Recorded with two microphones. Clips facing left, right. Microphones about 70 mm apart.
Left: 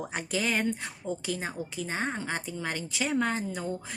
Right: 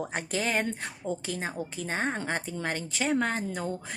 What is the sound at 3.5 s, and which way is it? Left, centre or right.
Speech, right.